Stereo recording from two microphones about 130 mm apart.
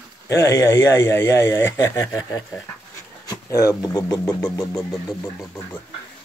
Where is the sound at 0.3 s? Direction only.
25° left (ahead or behind).